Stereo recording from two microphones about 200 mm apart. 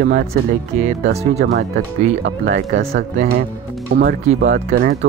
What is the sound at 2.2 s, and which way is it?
Speech, 60° right (ahead or behind).